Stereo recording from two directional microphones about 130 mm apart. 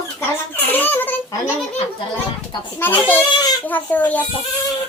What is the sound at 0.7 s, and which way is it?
Speech, 15° left (ahead or behind).